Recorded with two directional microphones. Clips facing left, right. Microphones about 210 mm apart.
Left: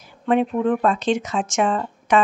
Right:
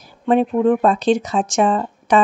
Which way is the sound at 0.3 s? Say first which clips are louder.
Right 4 dB; 35° right (ahead or behind).